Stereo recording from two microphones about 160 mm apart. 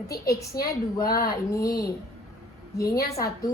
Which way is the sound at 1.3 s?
20° left (ahead or behind).